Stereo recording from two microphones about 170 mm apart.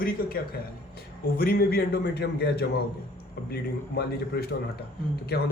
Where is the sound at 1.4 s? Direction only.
60° left (ahead or behind).